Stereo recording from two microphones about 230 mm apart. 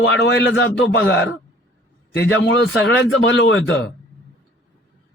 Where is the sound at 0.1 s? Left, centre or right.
Left.